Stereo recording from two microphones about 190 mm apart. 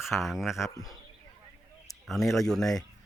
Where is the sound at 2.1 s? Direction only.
Centre (ahead or behind).